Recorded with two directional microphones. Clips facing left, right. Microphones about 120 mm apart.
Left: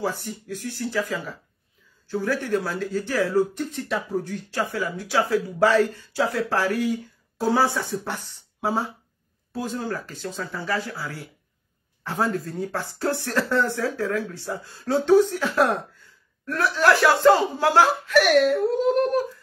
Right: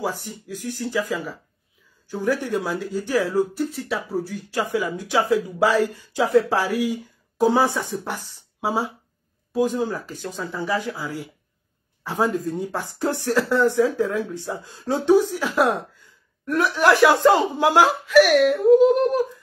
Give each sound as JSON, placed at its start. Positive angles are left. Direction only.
{"t": 0.0, "sound": "speech", "side_deg": -15}
{"t": 3.5, "sound": "speech", "side_deg": -5}